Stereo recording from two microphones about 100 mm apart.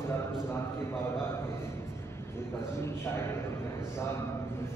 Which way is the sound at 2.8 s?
25° left (ahead or behind).